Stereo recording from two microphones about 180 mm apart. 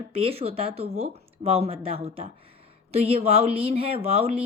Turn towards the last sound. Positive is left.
turn(degrees=-35)  # may be behind; listen again after turning